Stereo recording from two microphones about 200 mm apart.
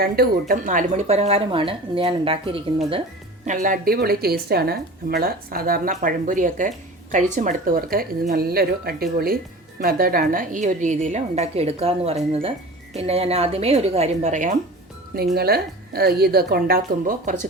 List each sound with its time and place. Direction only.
0.0 s speech: 50° right (ahead or behind); by 3.0 s 25° right (ahead or behind)
3.4 s a woman's voice: 40° right (ahead or behind)
15.4 s a woman's voice: 50° right (ahead or behind)